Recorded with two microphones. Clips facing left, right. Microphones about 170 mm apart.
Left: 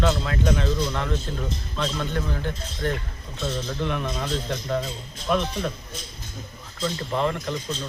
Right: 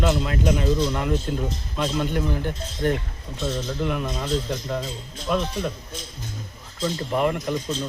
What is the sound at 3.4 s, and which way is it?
Speech, 5° right (ahead or behind).